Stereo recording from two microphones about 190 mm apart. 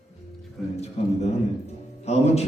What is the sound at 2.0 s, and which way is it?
Speech, 35° left (ahead or behind).